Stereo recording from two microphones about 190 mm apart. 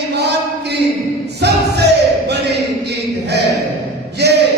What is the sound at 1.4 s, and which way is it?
Music, 60° right (ahead or behind).